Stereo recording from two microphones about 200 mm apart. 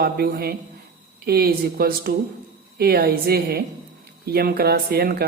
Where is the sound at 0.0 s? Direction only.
50° right (ahead or behind).